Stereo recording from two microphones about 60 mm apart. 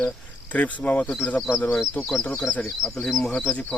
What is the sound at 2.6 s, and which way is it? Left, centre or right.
Speech, centre.